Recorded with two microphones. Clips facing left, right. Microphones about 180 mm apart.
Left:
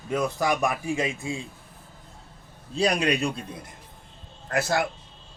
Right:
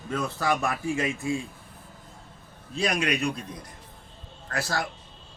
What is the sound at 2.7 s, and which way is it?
Speech, 35° left (ahead or behind).